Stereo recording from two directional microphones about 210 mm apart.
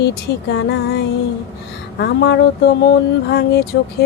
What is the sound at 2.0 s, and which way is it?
A woman's voice, 55° left (ahead or behind).